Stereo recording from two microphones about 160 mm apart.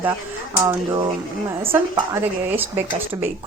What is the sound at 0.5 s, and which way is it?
Speech, 20° right (ahead or behind).